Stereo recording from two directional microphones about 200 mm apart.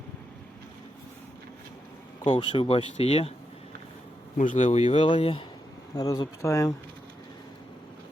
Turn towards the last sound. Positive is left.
turn(degrees=15)  # may be behind; listen again after turning